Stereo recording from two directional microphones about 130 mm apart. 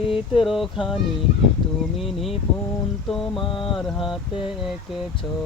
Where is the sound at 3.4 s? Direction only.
40° left (ahead or behind).